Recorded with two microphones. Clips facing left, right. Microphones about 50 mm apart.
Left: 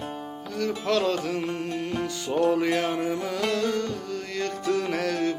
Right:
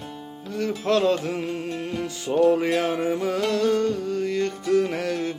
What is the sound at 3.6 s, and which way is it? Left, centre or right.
Music, right.